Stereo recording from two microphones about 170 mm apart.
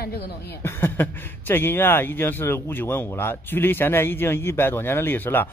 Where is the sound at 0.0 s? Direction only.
70° left (ahead or behind).